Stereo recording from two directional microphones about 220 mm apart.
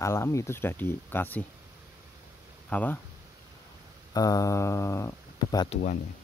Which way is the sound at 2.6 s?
10° left (ahead or behind).